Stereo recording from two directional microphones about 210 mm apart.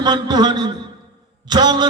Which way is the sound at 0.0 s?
20° right (ahead or behind).